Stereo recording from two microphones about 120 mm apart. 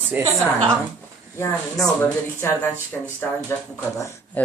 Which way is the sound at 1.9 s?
20° left (ahead or behind).